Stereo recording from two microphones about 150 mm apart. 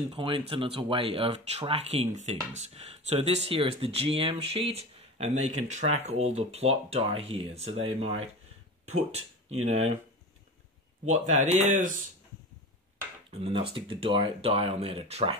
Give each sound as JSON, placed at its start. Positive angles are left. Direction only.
{"t": 0.1, "sound": "speech", "side_deg": -35}
{"t": 11.1, "sound": "speech", "side_deg": -50}
{"t": 13.3, "sound": "speech", "side_deg": -40}